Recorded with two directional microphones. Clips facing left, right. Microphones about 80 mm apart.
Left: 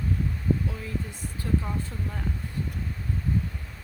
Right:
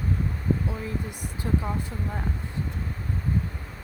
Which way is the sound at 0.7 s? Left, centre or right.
Right.